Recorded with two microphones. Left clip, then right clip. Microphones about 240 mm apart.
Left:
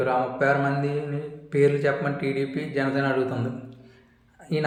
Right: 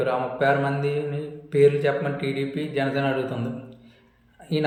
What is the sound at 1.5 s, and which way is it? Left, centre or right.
A man's voice, centre.